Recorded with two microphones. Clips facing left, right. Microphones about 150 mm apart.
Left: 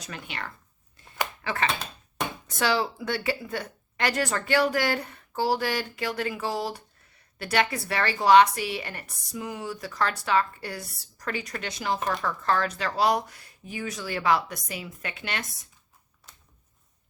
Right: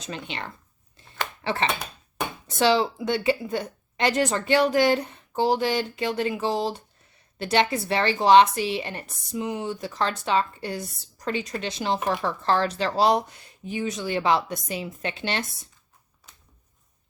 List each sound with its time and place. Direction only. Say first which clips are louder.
0.0 s speech: right 3 dB; 25° right (ahead or behind)